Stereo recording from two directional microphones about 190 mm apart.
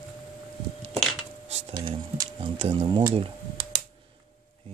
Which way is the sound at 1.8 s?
20° right (ahead or behind).